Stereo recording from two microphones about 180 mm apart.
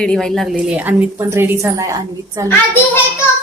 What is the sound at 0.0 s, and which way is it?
A woman's voice, 5° left (ahead or behind).